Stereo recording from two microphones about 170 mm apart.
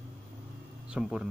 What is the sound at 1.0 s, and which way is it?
Speech, 5° right (ahead or behind).